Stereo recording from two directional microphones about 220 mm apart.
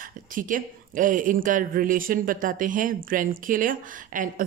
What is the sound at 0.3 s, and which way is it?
A woman's voice, 40° right (ahead or behind).